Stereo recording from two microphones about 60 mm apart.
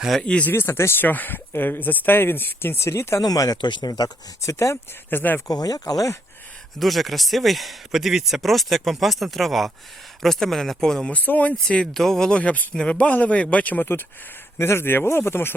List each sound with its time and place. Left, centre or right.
0.5 s speech: left
1.0 s speech: left
2.8 s speech: left
3.2 s speech: left
5.1 s speech: left
5.5 s speech: left
6.7 s speech: centre
11.1 s speech: left
11.6 s speech: centre
12.4 s speech: left
14.6 s speech: left